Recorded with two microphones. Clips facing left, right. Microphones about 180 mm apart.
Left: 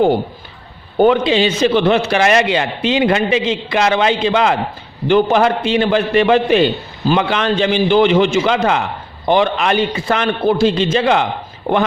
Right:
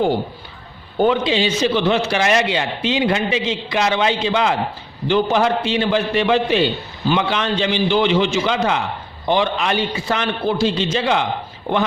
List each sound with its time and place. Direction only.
0.9 s a man's voice: 60° left (ahead or behind)